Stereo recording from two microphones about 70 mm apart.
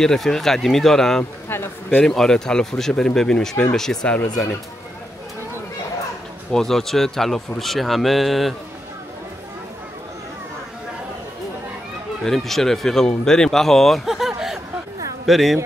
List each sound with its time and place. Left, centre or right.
0.0 s speech: centre
1.5 s a sound: left
2.0 s speech: centre
6.5 s speech: centre
12.3 s speech: centre